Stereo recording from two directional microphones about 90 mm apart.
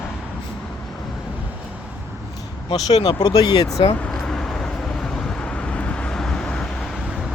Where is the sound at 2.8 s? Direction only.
50° left (ahead or behind).